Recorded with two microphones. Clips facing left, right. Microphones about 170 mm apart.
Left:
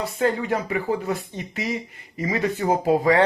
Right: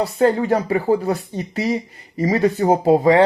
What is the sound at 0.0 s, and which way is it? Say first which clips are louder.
Speech: right 6 dB; 35° right (ahead or behind).